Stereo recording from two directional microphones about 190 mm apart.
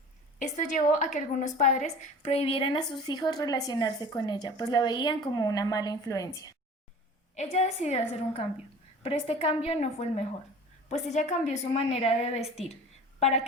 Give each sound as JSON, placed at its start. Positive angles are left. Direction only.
{"t": 0.3, "sound": "a woman's voice", "side_deg": 40}
{"t": 7.3, "sound": "a woman's voice", "side_deg": 35}